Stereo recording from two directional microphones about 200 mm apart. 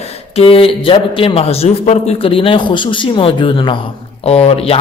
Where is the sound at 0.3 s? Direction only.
30° left (ahead or behind).